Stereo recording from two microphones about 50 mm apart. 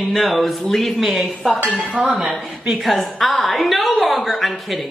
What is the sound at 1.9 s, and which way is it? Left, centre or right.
Speech, right.